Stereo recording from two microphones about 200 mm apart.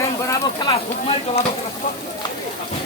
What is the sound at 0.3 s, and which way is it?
Speech, 20° left (ahead or behind).